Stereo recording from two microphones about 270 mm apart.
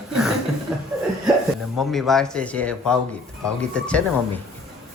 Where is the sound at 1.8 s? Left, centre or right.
Centre.